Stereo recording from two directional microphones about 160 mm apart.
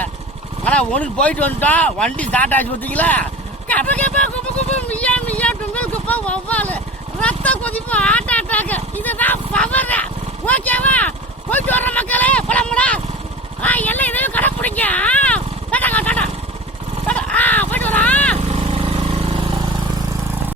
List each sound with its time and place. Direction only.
0.6 s speech: 5° left (ahead or behind)
7.2 s a sound: 10° left (ahead or behind)
11.5 s speech: 10° left (ahead or behind)
13.6 s a sound: 10° left (ahead or behind)
17.1 s vehicle: 5° left (ahead or behind)
18.3 s vehicle: 40° right (ahead or behind)